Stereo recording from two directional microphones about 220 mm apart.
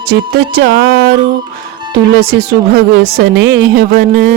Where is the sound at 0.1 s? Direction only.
45° right (ahead or behind).